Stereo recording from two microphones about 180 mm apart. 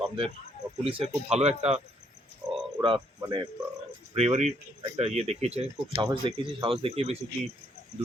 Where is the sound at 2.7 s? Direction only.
25° right (ahead or behind).